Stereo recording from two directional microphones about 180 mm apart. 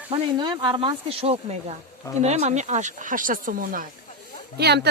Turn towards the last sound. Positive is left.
turn(degrees=-65)  # may be behind; listen again after turning